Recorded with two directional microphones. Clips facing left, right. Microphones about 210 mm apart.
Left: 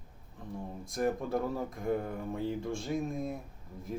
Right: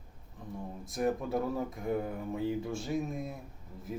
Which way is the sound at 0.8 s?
Centre (ahead or behind).